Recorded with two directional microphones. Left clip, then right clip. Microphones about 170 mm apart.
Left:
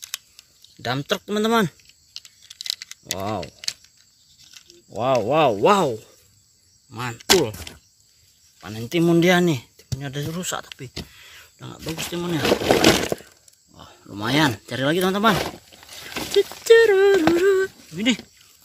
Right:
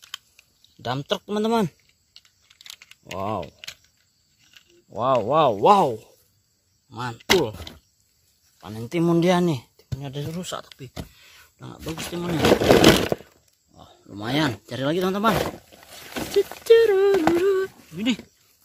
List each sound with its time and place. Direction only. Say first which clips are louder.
0.0 s typing: left 4 dB; 5° right (ahead or behind)
2.4 s crumpling: left 13 dB; 5° right (ahead or behind)
4.8 s speech: left 1 dB; 5° right (ahead or behind)
8.5 s speech: left 3 dB; 5° right (ahead or behind)
11.1 s a sound: left 5 dB; centre (ahead or behind)
11.9 s speech: left 3 dB; centre (ahead or behind)
12.4 s speech: right 2 dB; 30° right (ahead or behind)
13.7 s speech: left 4 dB; 5° left (ahead or behind)
15.3 s speech: even; 35° right (ahead or behind)
15.7 s a sound: left 2 dB; 50° right (ahead or behind)
16.6 s a sound: left 2 dB; centre (ahead or behind)
17.4 s sheep: left 3 dB; 5° left (ahead or behind)